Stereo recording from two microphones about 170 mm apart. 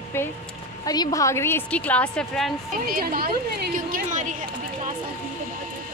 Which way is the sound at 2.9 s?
60° right (ahead or behind).